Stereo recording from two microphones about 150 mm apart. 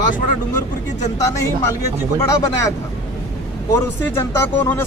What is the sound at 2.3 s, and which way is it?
Speech, 20° left (ahead or behind).